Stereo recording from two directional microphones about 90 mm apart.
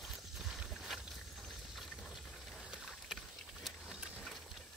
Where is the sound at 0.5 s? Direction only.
5° right (ahead or behind).